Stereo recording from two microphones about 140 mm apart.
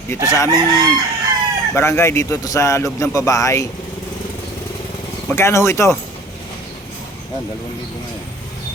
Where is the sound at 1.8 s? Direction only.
20° left (ahead or behind).